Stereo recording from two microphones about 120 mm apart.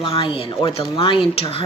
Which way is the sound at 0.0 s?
45° left (ahead or behind).